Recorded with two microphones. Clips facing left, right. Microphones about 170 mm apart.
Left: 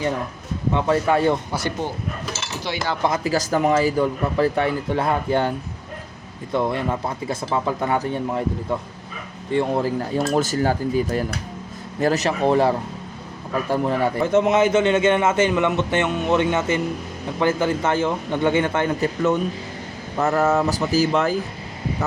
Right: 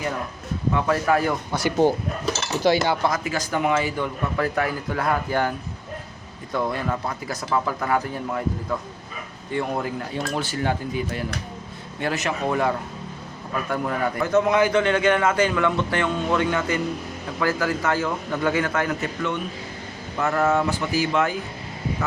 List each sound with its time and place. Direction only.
0.7 s a man's voice: 25° left (ahead or behind)
2.6 s speech: 45° right (ahead or behind)
3.2 s a man's voice: 40° left (ahead or behind)